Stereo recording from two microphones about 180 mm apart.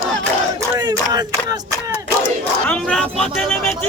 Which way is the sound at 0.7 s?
20° right (ahead or behind).